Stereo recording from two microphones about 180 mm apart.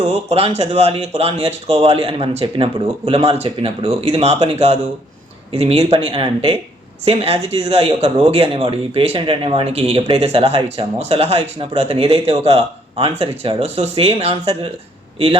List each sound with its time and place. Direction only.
0.3 s speech: 35° right (ahead or behind)